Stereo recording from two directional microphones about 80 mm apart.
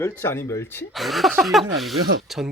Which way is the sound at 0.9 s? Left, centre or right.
Centre.